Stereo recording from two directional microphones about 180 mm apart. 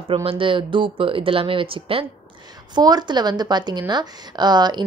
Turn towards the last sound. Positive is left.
turn(degrees=-25)  # may be behind; listen again after turning